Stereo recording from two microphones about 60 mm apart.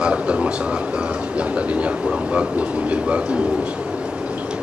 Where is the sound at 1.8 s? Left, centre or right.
Right.